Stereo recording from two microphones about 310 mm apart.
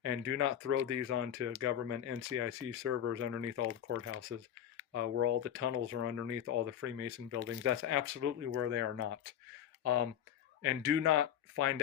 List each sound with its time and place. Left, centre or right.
0.0 s speech: right
10.6 s speech: right